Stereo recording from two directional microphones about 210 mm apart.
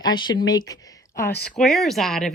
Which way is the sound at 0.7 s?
15° left (ahead or behind).